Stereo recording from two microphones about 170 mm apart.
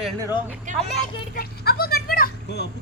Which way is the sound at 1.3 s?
65° left (ahead or behind).